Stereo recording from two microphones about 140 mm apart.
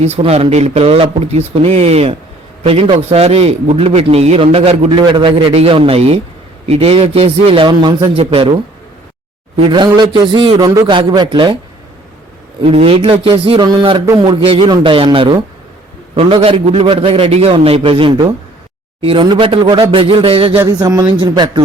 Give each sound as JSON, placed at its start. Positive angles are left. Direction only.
{"t": 0.0, "sound": "a man's voice", "side_deg": -50}
{"t": 9.6, "sound": "a man's voice", "side_deg": -35}
{"t": 12.6, "sound": "a man's voice", "side_deg": -40}
{"t": 20.7, "sound": "speech", "side_deg": -30}